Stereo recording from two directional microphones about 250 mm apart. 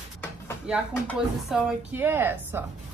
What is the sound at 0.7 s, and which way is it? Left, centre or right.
A woman's voice, centre.